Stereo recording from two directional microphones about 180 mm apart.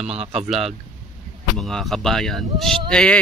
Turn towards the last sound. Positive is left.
turn(degrees=5)  # may be behind; listen again after turning